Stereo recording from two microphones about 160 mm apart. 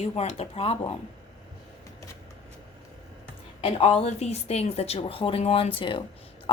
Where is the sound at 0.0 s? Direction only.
40° left (ahead or behind).